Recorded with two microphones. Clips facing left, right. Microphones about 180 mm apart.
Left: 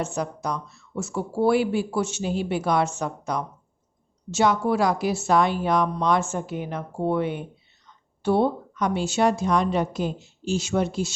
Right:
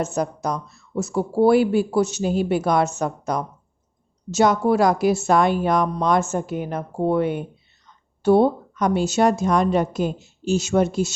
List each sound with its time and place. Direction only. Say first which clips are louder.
0.0 s speech: right 4 dB; 40° right (ahead or behind)